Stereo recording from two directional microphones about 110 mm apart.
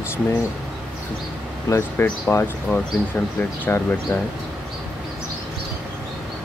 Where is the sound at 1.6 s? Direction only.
25° left (ahead or behind).